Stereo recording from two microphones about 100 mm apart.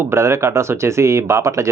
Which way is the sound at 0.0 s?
25° right (ahead or behind).